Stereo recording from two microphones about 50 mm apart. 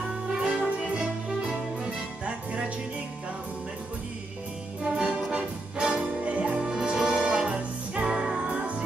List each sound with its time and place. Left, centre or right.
0.4 s music: right
4.9 s music: centre